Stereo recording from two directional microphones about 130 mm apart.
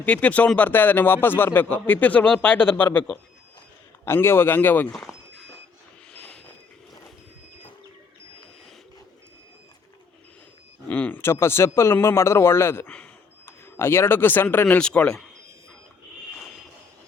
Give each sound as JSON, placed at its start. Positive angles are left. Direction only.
{"t": 0.0, "sound": "speech", "side_deg": 10}
{"t": 4.9, "sound": "speech", "side_deg": 0}
{"t": 6.1, "sound": "vehicle", "side_deg": 5}
{"t": 10.8, "sound": "speech", "side_deg": 10}
{"t": 12.9, "sound": "a sound", "side_deg": 10}
{"t": 13.7, "sound": "speech", "side_deg": 20}